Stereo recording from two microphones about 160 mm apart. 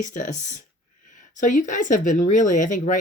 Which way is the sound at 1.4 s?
50° left (ahead or behind).